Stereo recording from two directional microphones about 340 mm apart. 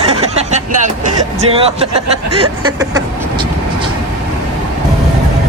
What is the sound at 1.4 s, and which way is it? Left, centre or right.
Speech, centre.